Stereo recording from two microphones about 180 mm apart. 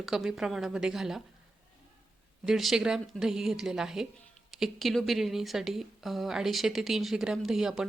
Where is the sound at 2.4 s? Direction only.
Centre (ahead or behind).